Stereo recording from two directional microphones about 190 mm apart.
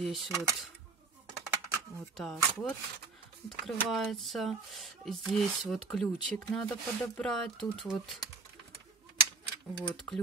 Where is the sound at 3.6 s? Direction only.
Centre (ahead or behind).